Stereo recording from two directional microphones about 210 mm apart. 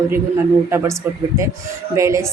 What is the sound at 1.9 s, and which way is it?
Speech, 15° right (ahead or behind).